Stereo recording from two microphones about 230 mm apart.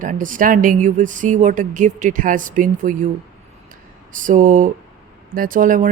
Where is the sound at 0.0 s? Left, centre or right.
Right.